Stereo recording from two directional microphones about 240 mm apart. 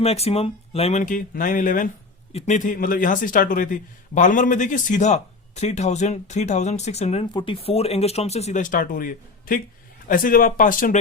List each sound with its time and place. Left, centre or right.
0.0 s speech: left